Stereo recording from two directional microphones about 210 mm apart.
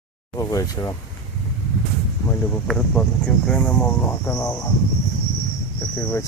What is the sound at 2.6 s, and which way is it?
Speech, 5° left (ahead or behind).